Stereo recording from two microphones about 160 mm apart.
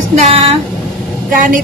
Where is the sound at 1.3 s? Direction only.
55° right (ahead or behind).